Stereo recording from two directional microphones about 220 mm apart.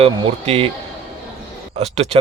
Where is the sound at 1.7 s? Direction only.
25° right (ahead or behind).